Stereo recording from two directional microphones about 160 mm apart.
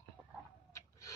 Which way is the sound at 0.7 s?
20° left (ahead or behind).